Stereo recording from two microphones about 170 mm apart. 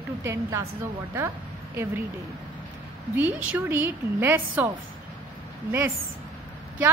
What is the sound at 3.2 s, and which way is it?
A woman's voice, 10° right (ahead or behind).